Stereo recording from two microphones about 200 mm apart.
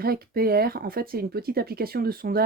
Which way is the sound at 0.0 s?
50° right (ahead or behind).